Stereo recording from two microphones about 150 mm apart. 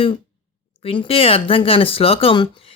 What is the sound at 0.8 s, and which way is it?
Speech, 35° left (ahead or behind).